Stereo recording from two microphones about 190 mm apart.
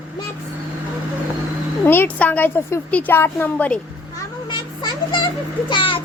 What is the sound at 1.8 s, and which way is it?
A woman's voice, 10° left (ahead or behind).